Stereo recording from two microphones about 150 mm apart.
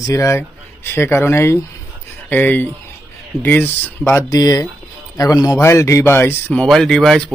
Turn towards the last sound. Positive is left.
turn(degrees=0)  # may be behind; listen again after turning